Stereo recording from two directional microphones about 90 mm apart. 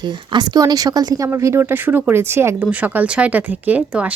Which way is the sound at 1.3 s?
30° right (ahead or behind).